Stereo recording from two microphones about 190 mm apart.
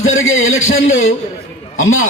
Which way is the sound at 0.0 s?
90° left.